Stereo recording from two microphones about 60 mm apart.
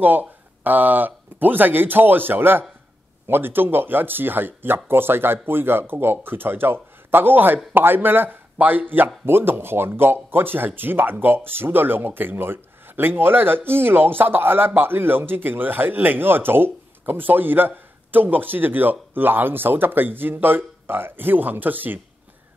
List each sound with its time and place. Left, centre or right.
0.0 s speech: right